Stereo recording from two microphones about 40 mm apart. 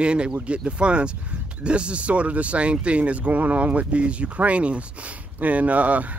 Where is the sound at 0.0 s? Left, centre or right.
Right.